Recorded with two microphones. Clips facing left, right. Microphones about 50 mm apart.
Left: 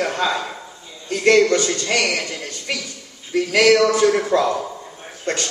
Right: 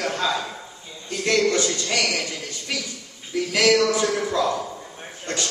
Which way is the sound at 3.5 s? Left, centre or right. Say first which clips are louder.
Left 4 dB; left.